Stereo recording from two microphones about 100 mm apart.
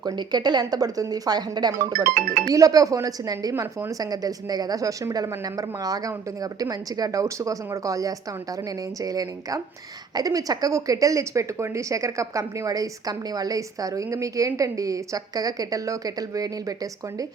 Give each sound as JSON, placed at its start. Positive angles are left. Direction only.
{"t": 0.0, "sound": "speech", "side_deg": -45}